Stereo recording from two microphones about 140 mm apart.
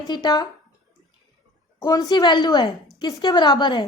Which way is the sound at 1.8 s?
30° left (ahead or behind).